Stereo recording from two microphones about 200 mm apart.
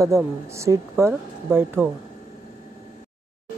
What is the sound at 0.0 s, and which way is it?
Speech, 15° right (ahead or behind).